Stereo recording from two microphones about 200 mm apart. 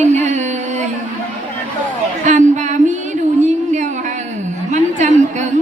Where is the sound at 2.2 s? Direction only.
40° right (ahead or behind).